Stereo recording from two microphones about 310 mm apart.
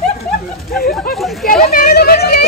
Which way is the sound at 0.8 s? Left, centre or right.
Left.